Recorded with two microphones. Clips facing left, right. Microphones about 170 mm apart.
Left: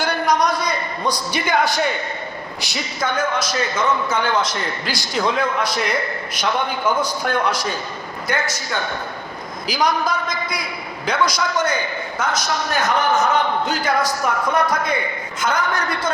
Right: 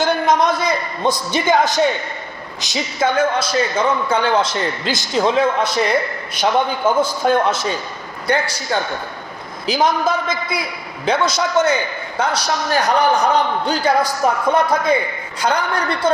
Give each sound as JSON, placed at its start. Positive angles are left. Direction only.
{"t": 0.0, "sound": "a man's voice", "side_deg": -25}
{"t": 8.7, "sound": "a man's voice", "side_deg": -30}